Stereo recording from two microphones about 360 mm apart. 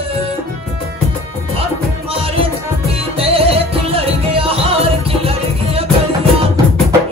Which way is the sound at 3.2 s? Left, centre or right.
Centre.